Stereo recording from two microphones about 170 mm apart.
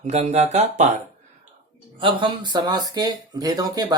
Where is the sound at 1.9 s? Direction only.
30° right (ahead or behind).